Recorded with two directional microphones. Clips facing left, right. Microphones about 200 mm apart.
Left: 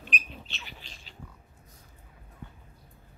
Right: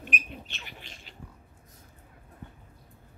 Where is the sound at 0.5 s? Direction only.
55° right (ahead or behind).